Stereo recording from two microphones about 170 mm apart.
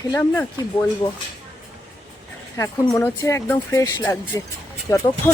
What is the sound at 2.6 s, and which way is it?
A woman's voice, 20° left (ahead or behind).